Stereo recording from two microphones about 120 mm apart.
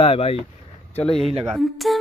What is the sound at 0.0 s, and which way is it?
Speech, 55° left (ahead or behind).